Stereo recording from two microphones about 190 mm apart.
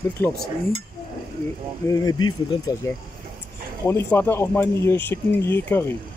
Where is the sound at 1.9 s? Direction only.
20° left (ahead or behind).